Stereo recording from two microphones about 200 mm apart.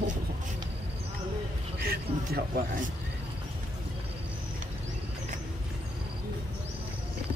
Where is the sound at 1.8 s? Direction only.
50° right (ahead or behind).